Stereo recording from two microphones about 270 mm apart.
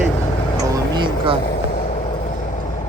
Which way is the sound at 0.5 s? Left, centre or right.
Centre.